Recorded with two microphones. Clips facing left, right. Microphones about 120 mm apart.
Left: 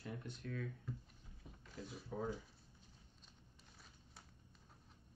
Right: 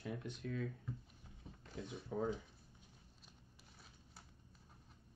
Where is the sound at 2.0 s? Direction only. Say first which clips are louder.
Right 4 dB; 25° right (ahead or behind).